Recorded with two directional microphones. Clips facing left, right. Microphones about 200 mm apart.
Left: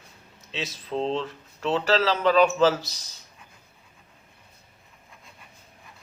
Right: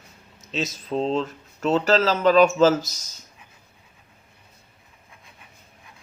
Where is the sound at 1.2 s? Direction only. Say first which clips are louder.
Right 5 dB; 45° right (ahead or behind).